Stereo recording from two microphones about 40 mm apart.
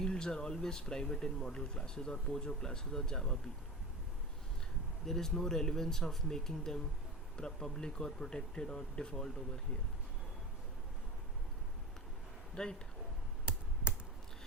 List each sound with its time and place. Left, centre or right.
0.0 s speech: centre
5.0 s speech: centre
12.6 s speech: left
13.5 s computer keyboard: right